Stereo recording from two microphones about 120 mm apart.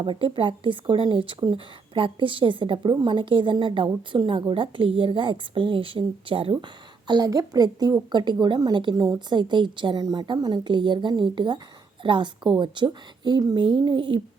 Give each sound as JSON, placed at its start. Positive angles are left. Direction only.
{"t": 0.0, "sound": "speech", "side_deg": -45}
{"t": 2.7, "sound": "speech", "side_deg": -35}
{"t": 7.1, "sound": "a woman's voice", "side_deg": -30}